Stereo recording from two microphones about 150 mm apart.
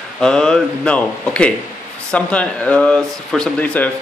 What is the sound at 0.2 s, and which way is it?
Speech, 5° left (ahead or behind).